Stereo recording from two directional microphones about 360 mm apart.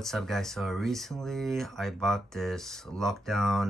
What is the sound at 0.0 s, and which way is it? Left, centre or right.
Speech, centre.